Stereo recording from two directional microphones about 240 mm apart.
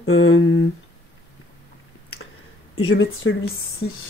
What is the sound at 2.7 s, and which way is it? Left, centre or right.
Speech, left.